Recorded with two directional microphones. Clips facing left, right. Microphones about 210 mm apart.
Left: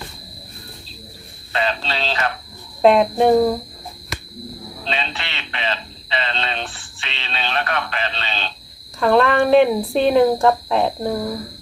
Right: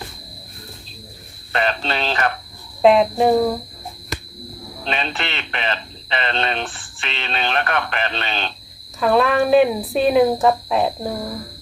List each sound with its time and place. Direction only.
1.9 s speech: 55° right (ahead or behind)
2.8 s speech: centre (ahead or behind)
4.9 s speech: 50° right (ahead or behind)
9.0 s speech: 5° right (ahead or behind)